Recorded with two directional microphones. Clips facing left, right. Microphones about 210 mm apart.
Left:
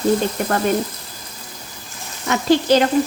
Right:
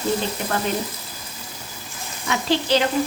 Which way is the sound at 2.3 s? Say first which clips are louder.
Left 6 dB; 45° left (ahead or behind).